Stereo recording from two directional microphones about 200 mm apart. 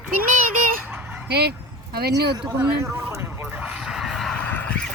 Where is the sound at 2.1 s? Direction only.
10° right (ahead or behind).